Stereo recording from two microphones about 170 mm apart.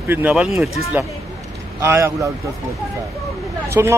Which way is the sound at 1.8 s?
15° right (ahead or behind).